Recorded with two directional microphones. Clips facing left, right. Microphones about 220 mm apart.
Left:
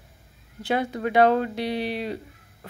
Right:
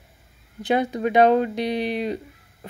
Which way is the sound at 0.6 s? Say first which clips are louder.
Right 4 dB; 20° right (ahead or behind).